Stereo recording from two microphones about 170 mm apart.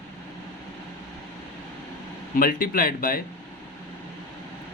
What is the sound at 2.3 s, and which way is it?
Speech, 55° left (ahead or behind).